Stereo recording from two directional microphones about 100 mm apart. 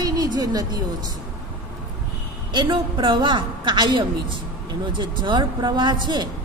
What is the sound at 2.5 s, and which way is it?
A woman's voice, 50° right (ahead or behind).